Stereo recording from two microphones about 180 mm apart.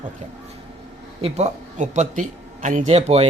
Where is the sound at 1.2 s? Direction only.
35° right (ahead or behind).